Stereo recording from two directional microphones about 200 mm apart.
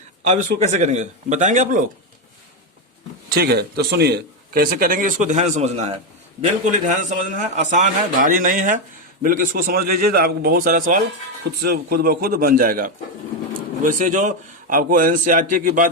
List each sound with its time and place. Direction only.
0.3 s a man's voice: 40° right (ahead or behind)
3.2 s a man's voice: 55° right (ahead or behind)